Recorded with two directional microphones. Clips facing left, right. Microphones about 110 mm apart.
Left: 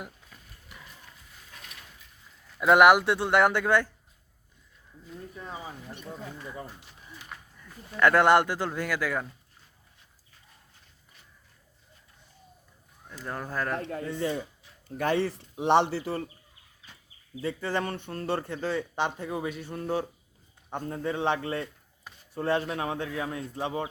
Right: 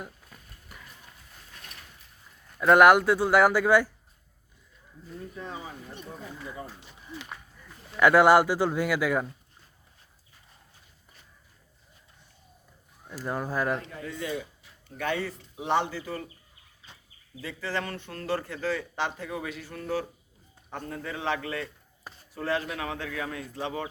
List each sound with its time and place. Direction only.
2.6 s a man's voice: centre (ahead or behind)
7.6 s speech: 10° right (ahead or behind)
13.1 s speech: 10° right (ahead or behind)
14.1 s speech: 30° left (ahead or behind)
17.4 s a man's voice: 20° left (ahead or behind)